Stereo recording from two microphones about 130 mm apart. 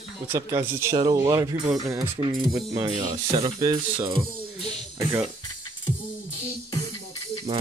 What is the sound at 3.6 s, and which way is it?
Speech, 35° right (ahead or behind).